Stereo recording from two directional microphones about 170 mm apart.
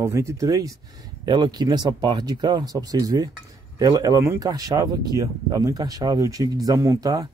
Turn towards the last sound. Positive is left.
turn(degrees=-20)  # may be behind; listen again after turning